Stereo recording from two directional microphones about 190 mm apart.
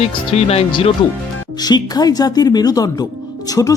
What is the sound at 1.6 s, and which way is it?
Speech, 20° left (ahead or behind).